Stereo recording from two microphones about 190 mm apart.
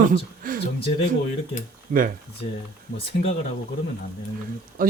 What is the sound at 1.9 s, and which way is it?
Speech, 45° right (ahead or behind).